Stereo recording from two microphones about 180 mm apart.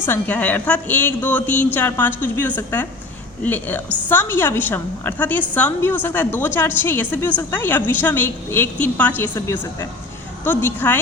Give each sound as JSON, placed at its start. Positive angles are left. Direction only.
{"t": 0.0, "sound": "a woman's voice", "side_deg": 10}
{"t": 9.3, "sound": "a woman's voice", "side_deg": 20}